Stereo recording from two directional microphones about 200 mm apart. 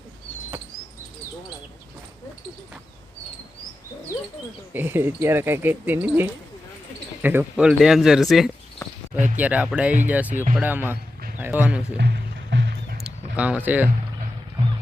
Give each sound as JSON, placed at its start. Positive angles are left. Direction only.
{"t": 4.7, "sound": "speech", "side_deg": -10}
{"t": 9.1, "sound": "speech", "side_deg": -40}
{"t": 9.4, "sound": "speech", "side_deg": -5}
{"t": 11.3, "sound": "a sound", "side_deg": -10}
{"t": 11.9, "sound": "music", "side_deg": -55}
{"t": 13.1, "sound": "a sound", "side_deg": -5}